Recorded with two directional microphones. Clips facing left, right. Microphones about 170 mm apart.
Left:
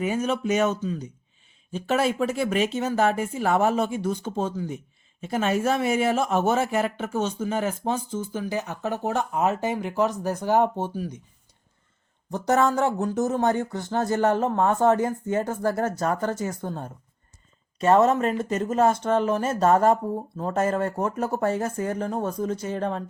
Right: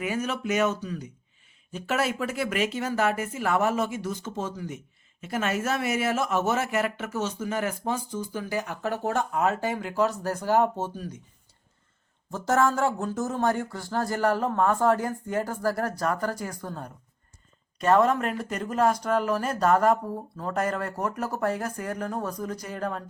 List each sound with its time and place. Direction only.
0.0 s speech: 25° left (ahead or behind)
12.3 s speech: 20° left (ahead or behind)